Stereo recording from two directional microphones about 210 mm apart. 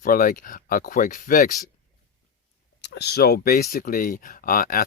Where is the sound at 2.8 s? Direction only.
50° left (ahead or behind).